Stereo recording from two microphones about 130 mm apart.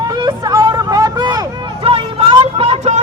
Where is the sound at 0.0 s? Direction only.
35° right (ahead or behind).